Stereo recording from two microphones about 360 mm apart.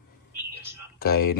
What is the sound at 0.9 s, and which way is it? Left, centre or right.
Speech, left.